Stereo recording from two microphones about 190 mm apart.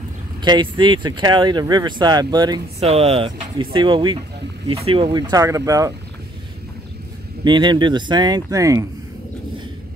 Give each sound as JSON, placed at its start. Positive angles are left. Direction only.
{"t": 0.4, "sound": "speech", "side_deg": -25}
{"t": 7.4, "sound": "speech", "side_deg": -25}